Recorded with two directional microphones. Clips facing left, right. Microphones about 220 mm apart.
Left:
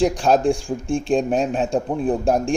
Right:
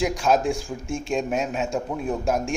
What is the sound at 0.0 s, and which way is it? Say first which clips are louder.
A man's voice: left 4 dB; 35° left (ahead or behind).